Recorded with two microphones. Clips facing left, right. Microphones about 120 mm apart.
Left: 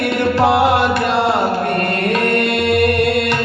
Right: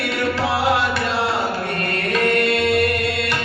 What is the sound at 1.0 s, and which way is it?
Chant, 55° left (ahead or behind).